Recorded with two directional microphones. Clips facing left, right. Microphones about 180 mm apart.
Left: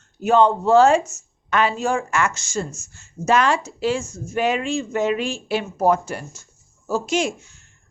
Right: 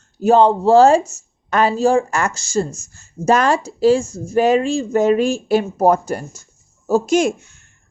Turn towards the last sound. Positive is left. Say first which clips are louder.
# right 6 dB
turn(degrees=-60)  # may be behind; listen again after turning